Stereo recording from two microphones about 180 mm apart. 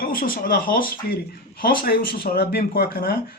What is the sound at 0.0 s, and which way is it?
Speech, 55° left (ahead or behind).